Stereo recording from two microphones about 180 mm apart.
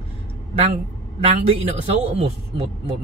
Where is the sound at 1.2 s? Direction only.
35° right (ahead or behind).